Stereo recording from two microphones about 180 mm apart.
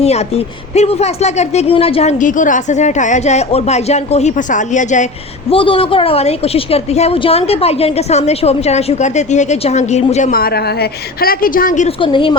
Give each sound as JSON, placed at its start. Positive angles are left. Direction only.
{"t": 0.0, "sound": "speech", "side_deg": 35}
{"t": 5.5, "sound": "speech", "side_deg": 30}
{"t": 10.3, "sound": "a woman's voice", "side_deg": 60}
{"t": 11.9, "sound": "a woman's voice", "side_deg": 30}